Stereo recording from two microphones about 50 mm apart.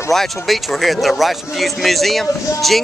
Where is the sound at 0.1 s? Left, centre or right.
Centre.